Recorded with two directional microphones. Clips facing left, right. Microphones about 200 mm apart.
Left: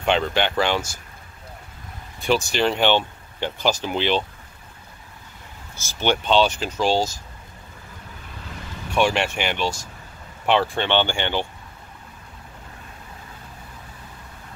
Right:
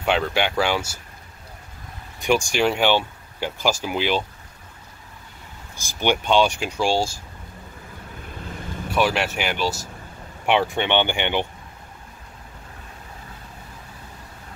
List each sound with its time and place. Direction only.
0.0 s speech: 5° right (ahead or behind)
2.1 s speech: 15° right (ahead or behind)
5.8 s speech: 15° right (ahead or behind)
8.9 s speech: 5° right (ahead or behind)